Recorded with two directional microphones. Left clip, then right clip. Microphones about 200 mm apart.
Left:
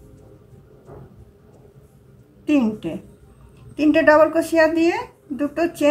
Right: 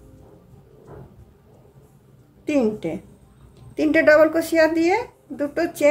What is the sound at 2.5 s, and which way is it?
A woman's voice, 30° right (ahead or behind).